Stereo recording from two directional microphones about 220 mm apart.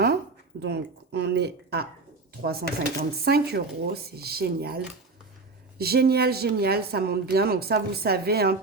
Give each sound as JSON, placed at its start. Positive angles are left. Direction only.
{"t": 0.6, "sound": "speech", "side_deg": -50}